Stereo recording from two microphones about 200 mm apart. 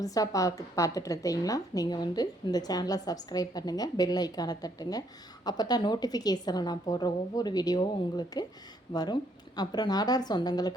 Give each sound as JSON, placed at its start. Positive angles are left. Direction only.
{"t": 0.0, "sound": "a woman's voice", "side_deg": 15}